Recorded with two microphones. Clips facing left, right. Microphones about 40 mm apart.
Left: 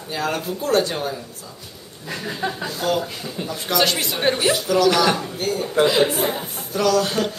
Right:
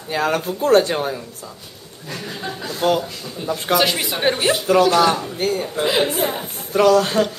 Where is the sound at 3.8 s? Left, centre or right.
Centre.